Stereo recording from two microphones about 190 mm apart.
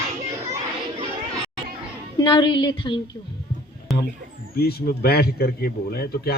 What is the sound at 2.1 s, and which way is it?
Speech, 25° left (ahead or behind).